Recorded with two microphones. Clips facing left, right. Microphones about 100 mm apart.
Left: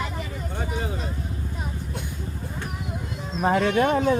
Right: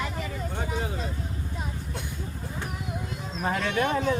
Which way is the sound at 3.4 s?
30° left (ahead or behind).